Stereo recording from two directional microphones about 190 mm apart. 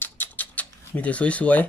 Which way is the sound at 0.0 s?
10° left (ahead or behind).